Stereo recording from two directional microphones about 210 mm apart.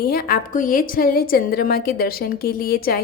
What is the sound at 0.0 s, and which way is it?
A woman's voice, 45° left (ahead or behind).